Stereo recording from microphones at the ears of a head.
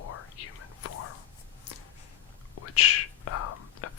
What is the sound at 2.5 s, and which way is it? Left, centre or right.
Whispering, left.